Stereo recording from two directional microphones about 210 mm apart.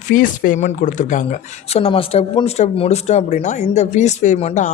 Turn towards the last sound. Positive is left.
turn(degrees=30)  # may be behind; listen again after turning